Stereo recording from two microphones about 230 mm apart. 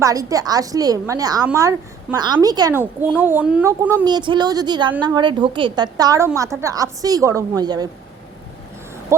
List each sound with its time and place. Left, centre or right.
0.0 s a woman's voice: centre